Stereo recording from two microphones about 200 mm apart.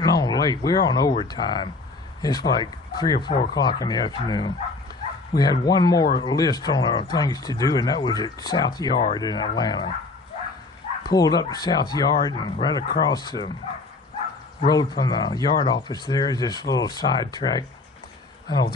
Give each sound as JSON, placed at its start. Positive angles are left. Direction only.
{"t": 0.0, "sound": "speech", "side_deg": 20}
{"t": 11.1, "sound": "speech", "side_deg": 20}
{"t": 14.7, "sound": "speech", "side_deg": 20}